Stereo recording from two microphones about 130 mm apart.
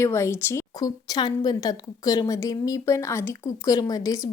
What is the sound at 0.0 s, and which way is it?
A woman's voice, 20° left (ahead or behind).